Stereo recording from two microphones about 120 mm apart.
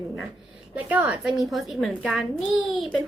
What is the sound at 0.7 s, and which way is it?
Speech, 15° right (ahead or behind).